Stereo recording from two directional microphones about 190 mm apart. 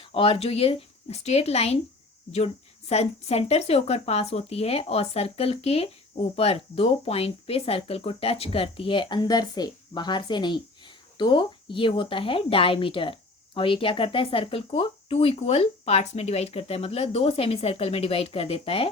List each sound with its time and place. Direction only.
0.0 s speech: 30° left (ahead or behind)
2.9 s speech: 35° left (ahead or behind)